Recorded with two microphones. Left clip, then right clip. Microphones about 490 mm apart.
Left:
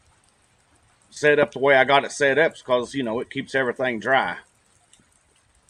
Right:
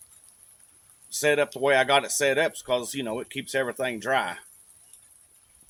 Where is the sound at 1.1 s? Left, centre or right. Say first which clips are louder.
Left 5 dB; right.